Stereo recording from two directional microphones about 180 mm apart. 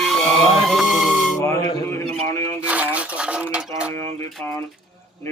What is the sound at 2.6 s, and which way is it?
Dishes, 10° right (ahead or behind).